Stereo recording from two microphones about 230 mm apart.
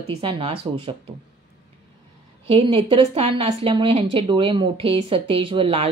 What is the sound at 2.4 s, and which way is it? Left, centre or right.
A woman's voice, right.